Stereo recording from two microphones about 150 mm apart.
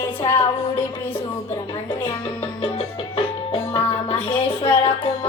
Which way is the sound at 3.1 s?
40° left (ahead or behind).